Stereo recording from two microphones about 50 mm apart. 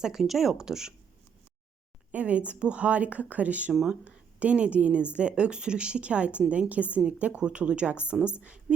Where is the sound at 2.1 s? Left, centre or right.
Right.